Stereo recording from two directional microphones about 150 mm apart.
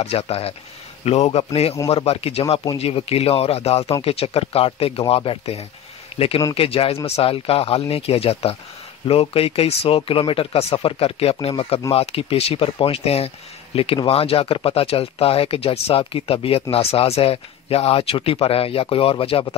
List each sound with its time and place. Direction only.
0.0 s a man's voice: 45° left (ahead or behind)